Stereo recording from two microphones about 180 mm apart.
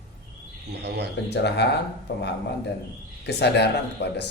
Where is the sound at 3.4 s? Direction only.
65° left (ahead or behind).